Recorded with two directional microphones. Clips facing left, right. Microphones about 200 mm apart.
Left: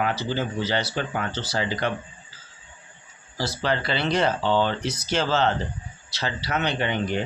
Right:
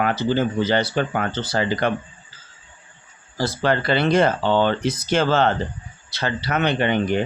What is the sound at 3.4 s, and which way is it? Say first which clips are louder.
Speech: right 5 dB; 50° right (ahead or behind).